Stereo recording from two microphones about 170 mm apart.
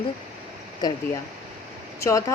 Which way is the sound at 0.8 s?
25° left (ahead or behind).